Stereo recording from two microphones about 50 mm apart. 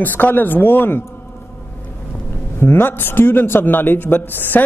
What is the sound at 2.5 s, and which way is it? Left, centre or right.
A man's voice, left.